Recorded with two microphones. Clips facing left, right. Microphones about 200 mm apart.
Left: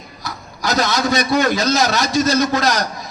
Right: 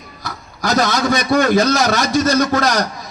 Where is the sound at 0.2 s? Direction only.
50° right (ahead or behind).